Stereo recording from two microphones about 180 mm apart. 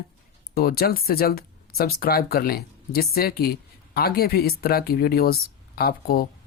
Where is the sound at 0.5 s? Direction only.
55° left (ahead or behind).